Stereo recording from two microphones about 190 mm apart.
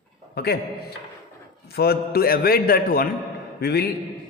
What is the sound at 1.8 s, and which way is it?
A man's voice, 55° left (ahead or behind).